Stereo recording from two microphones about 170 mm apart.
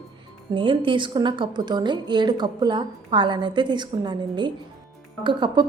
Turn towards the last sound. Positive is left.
turn(degrees=-25)  # may be behind; listen again after turning